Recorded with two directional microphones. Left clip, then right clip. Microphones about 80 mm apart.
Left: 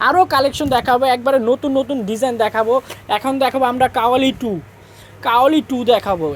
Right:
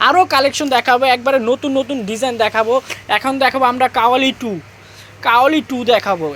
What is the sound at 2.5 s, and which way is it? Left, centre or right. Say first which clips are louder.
Speech: right 1 dB; left.